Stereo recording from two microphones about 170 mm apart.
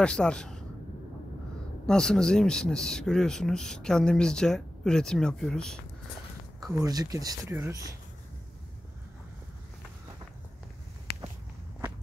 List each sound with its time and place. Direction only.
0.0 s speech: 5° left (ahead or behind)
1.9 s speech: 5° left (ahead or behind)
6.6 s speech: 20° right (ahead or behind)
11.1 s a sound: 70° left (ahead or behind)